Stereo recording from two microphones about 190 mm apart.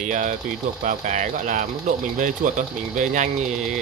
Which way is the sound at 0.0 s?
45° right (ahead or behind).